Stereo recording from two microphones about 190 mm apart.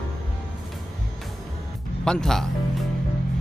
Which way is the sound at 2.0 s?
5° left (ahead or behind).